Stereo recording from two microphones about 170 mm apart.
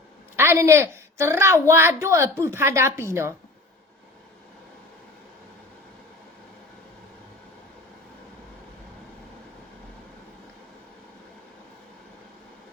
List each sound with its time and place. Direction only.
0.3 s a woman's voice: 15° right (ahead or behind)